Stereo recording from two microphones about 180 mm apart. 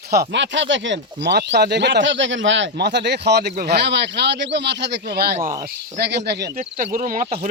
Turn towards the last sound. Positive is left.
turn(degrees=-40)  # may be behind; listen again after turning